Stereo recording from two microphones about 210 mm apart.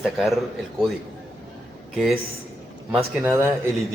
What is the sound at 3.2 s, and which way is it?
Speech, 15° right (ahead or behind).